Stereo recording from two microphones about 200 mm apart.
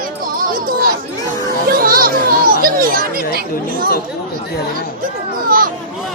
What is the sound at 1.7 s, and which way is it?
A child's voice, 45° right (ahead or behind).